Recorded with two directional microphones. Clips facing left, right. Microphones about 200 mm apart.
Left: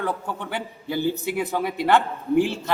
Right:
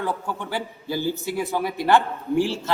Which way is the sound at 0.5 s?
20° left (ahead or behind).